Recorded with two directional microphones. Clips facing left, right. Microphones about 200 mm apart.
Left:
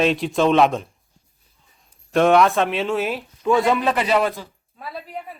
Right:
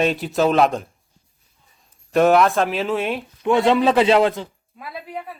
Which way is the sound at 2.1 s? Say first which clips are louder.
Even; centre (ahead or behind).